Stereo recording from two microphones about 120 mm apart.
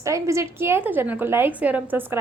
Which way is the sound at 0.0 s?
25° right (ahead or behind).